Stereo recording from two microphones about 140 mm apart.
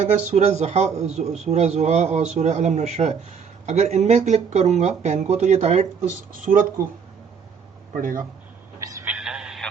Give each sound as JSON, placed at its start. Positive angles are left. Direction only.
{"t": 0.3, "sound": "speech", "side_deg": -55}
{"t": 6.3, "sound": "speech", "side_deg": -80}
{"t": 7.9, "sound": "speech", "side_deg": -75}
{"t": 8.8, "sound": "telephone", "side_deg": -25}
{"t": 9.0, "sound": "radio", "side_deg": -5}